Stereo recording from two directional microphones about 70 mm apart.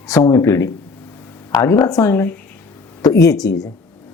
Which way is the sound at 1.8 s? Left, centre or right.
Left.